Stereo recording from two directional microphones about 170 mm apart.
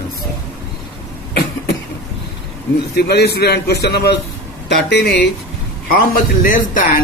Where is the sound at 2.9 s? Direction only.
75° left (ahead or behind).